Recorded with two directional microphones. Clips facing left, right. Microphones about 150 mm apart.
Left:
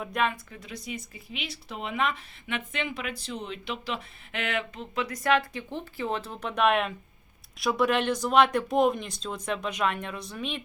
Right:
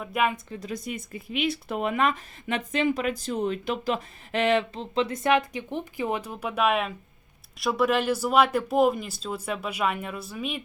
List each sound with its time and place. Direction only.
0.0 s speech: 5° right (ahead or behind)
0.6 s speech: 50° right (ahead or behind); by 10.6 s 5° right (ahead or behind)